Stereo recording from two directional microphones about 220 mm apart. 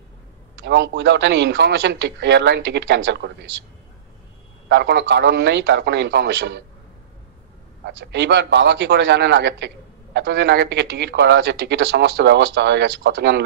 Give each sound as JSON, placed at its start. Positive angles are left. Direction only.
{"t": 0.7, "sound": "speech", "side_deg": -50}
{"t": 4.6, "sound": "speech", "side_deg": -50}
{"t": 7.8, "sound": "speech", "side_deg": -50}